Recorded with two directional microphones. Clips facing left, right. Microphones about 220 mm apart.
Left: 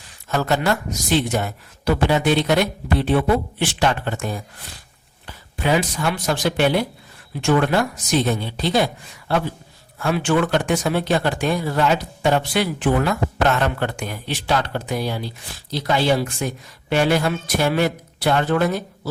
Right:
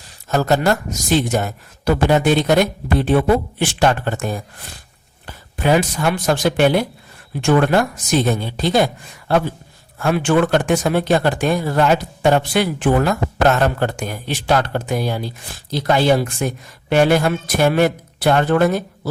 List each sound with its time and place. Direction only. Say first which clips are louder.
0.3 s a man's voice: right 4 dB; 40° right (ahead or behind)